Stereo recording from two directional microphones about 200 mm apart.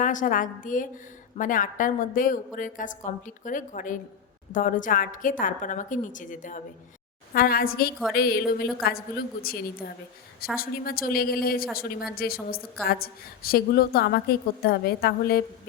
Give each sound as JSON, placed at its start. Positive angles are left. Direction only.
{"t": 0.0, "sound": "a woman's voice", "side_deg": 40}